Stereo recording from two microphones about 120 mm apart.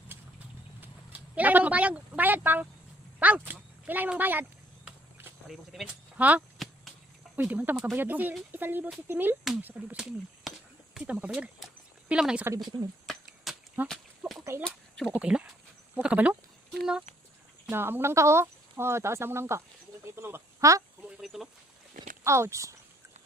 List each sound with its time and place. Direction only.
0.1 s clip-clop: 15° right (ahead or behind)
3.2 s speech: 10° right (ahead or behind)
5.5 s speech: centre (ahead or behind)
6.1 s speech: 15° right (ahead or behind)
12.6 s a sound: centre (ahead or behind)
14.6 s speech: 5° left (ahead or behind)
15.1 s speech: 10° right (ahead or behind)
17.7 s speech: 20° right (ahead or behind)
21.2 s speech: centre (ahead or behind)
22.2 s speech: 25° right (ahead or behind)